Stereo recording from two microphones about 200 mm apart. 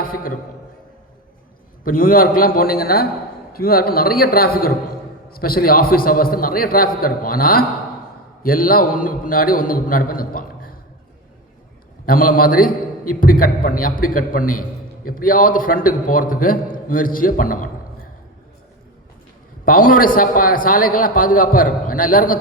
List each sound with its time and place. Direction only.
0.0 s a man's voice: 45° left (ahead or behind)
1.8 s a man's voice: 45° left (ahead or behind)
12.0 s a man's voice: 45° left (ahead or behind)
19.6 s a man's voice: 45° left (ahead or behind)